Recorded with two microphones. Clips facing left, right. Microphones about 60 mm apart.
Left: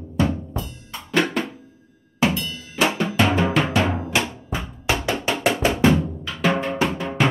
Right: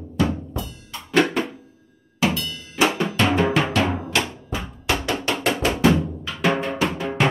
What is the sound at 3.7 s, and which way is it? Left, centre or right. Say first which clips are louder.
Drum: even; centre.